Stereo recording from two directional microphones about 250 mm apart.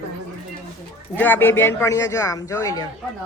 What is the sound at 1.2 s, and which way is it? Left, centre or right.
A man's voice, centre.